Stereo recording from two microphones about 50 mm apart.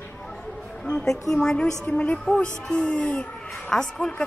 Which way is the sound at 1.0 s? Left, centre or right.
Centre.